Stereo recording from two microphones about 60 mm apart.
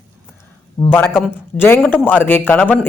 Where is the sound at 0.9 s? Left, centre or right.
Left.